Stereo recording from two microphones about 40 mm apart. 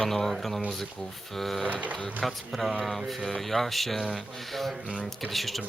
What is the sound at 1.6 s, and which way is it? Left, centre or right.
Speech, right.